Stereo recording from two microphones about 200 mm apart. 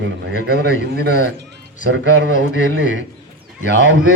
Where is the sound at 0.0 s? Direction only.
55° right (ahead or behind).